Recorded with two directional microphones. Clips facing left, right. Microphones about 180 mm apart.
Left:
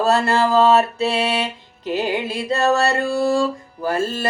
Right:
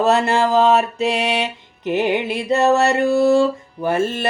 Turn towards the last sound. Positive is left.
turn(degrees=-20)  # may be behind; listen again after turning